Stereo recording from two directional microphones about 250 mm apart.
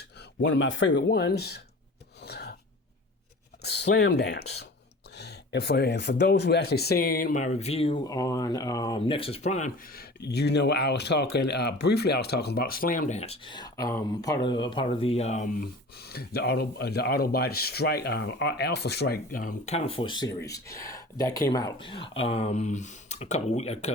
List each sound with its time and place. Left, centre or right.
0.4 s speech: left
2.2 s a sound: left
3.6 s speech: left
16.0 s speech: left